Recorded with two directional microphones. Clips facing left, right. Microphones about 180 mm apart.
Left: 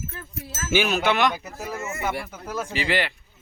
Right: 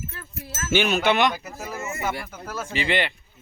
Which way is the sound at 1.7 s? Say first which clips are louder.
Even; 20° right (ahead or behind).